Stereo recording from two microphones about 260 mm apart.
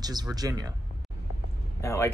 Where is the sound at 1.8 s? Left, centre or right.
Centre.